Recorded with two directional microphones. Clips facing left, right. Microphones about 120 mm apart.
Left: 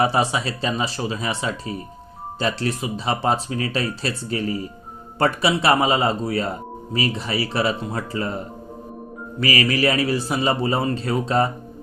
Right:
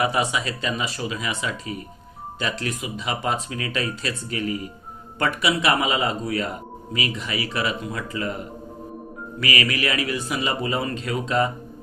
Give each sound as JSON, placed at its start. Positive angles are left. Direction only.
{"t": 0.0, "sound": "speech", "side_deg": 35}